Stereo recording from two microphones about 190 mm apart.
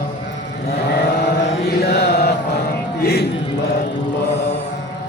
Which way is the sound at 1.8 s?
55° left (ahead or behind).